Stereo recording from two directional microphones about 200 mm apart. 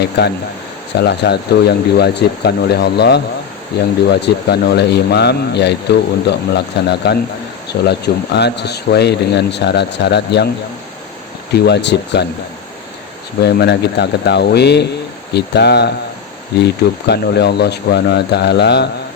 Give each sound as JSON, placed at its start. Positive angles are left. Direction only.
{"t": 0.9, "sound": "speech", "side_deg": 55}
{"t": 11.5, "sound": "speech", "side_deg": 55}
{"t": 13.4, "sound": "speech", "side_deg": 55}